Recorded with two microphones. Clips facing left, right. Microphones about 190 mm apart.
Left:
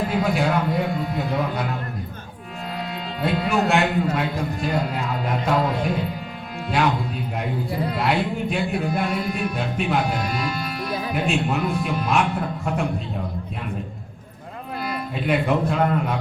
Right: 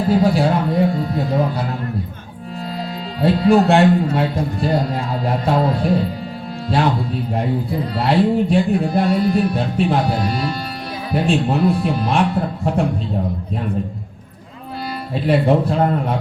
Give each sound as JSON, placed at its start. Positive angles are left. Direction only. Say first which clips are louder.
{"t": 0.1, "sound": "a man's voice", "louder": "right 9 dB", "side_deg": -35}
{"t": 3.2, "sound": "a man's voice", "louder": "right 8 dB", "side_deg": -35}
{"t": 15.1, "sound": "a man's voice", "louder": "right 6 dB", "side_deg": -35}